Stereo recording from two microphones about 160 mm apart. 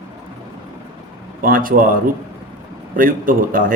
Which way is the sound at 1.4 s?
65° right (ahead or behind).